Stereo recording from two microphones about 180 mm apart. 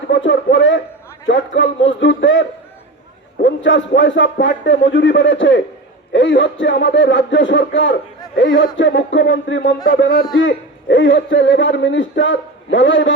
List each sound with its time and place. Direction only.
0.1 s a sound: 90° left
1.3 s a man's voice: 90° left; by 10.2 s 60° left (ahead or behind)
10.3 s a man's voice: 90° left